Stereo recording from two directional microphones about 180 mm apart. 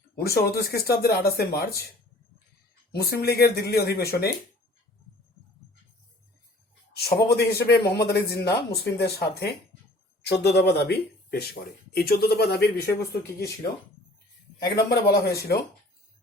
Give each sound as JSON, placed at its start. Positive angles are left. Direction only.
{"t": 0.2, "sound": "speech", "side_deg": 60}
{"t": 2.9, "sound": "speech", "side_deg": 60}
{"t": 6.9, "sound": "speech", "side_deg": 65}
{"t": 14.8, "sound": "speech", "side_deg": 60}